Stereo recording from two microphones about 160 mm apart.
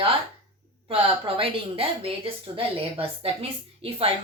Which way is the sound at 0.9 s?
35° right (ahead or behind).